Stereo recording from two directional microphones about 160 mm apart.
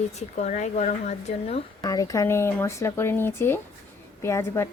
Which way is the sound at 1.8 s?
20° left (ahead or behind).